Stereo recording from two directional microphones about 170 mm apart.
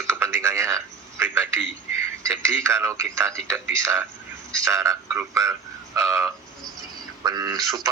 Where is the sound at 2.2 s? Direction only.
15° right (ahead or behind).